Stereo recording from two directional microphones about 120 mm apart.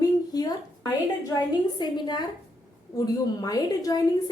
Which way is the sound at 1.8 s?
35° left (ahead or behind).